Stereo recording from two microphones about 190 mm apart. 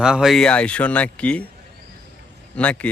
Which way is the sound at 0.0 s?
5° right (ahead or behind).